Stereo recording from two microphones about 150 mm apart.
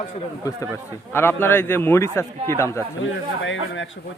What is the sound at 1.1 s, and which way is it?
A man's voice, 15° left (ahead or behind).